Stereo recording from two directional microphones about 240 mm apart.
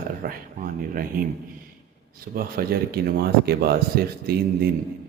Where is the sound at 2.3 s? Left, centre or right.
Right.